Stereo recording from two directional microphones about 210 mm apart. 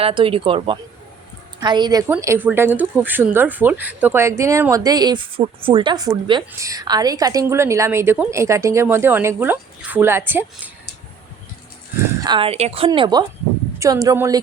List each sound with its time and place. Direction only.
0.0 s speech: 25° right (ahead or behind); by 10.7 s 10° right (ahead or behind)
12.2 s speech: 25° right (ahead or behind)